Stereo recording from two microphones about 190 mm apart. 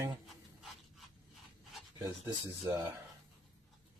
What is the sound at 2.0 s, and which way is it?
Speech, 20° right (ahead or behind).